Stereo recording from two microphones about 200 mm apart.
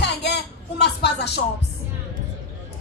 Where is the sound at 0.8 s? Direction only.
55° left (ahead or behind).